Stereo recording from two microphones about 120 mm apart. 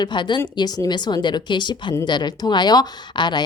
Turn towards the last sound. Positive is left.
turn(degrees=40)  # may be behind; listen again after turning